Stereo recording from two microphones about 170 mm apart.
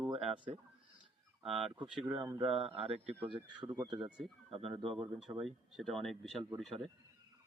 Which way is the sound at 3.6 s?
10° right (ahead or behind).